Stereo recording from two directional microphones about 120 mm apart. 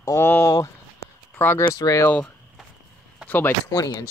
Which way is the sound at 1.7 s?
30° left (ahead or behind).